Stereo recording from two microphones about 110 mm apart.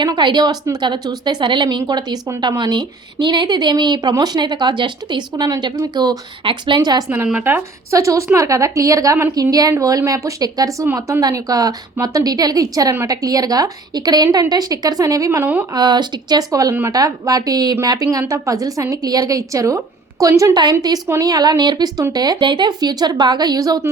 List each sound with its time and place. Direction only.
0.0 s a woman's voice: 45° right (ahead or behind)
7.4 s a woman's voice: 25° right (ahead or behind)
15.7 s a woman's voice: 40° right (ahead or behind)